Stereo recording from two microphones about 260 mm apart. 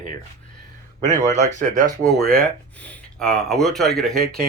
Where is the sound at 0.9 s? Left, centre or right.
Right.